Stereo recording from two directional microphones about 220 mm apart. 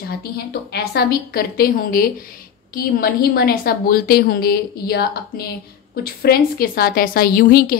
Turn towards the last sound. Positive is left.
turn(degrees=40)  # may be behind; listen again after turning